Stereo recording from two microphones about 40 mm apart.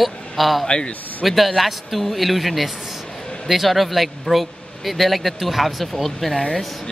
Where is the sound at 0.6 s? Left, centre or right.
Left.